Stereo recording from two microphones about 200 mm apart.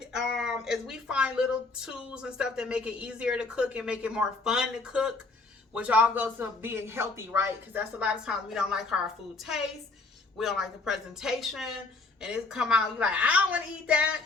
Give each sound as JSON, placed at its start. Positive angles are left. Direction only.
{"t": 0.0, "sound": "speech", "side_deg": 0}
{"t": 10.3, "sound": "speech", "side_deg": 0}